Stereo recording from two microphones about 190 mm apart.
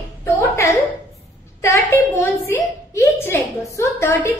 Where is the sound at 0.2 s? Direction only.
10° left (ahead or behind).